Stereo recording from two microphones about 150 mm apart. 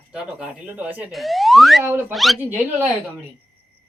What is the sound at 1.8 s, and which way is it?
Speech, 15° right (ahead or behind).